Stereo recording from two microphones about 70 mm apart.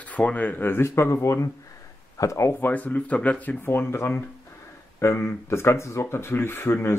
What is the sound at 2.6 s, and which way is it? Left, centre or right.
Speech, left.